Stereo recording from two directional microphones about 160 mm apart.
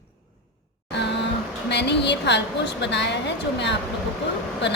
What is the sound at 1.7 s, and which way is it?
A woman's voice, 90° left.